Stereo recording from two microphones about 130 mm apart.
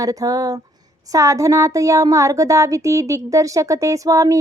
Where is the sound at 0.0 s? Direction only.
30° right (ahead or behind).